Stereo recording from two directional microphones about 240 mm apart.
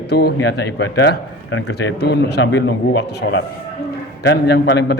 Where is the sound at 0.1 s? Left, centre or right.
Left.